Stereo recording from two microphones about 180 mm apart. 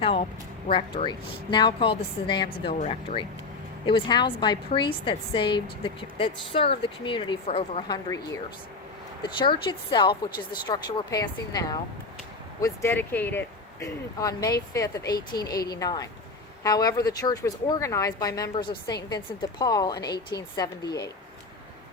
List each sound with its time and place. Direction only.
0.0 s speech: 30° left (ahead or behind)
2.7 s speech: 40° left (ahead or behind)
3.8 s speech: 25° left (ahead or behind)
7.9 s speech: 15° left (ahead or behind)